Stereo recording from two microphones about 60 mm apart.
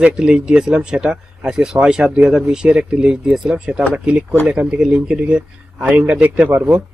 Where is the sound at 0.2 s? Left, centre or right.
Centre.